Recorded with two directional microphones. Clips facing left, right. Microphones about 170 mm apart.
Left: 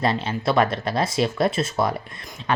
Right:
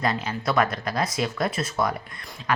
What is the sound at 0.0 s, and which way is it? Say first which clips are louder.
Speech: left 3 dB; 25° left (ahead or behind).